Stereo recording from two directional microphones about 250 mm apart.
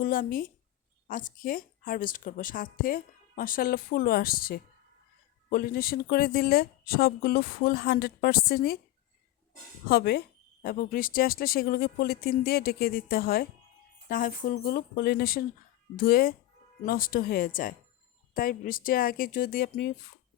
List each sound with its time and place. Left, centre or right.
0.0 s a woman's voice: left
9.9 s a woman's voice: left